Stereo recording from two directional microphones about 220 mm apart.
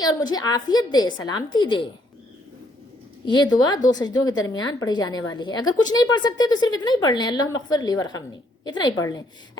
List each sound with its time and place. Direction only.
0.0 s a woman's voice: 20° left (ahead or behind)
3.2 s a woman's voice: 20° left (ahead or behind)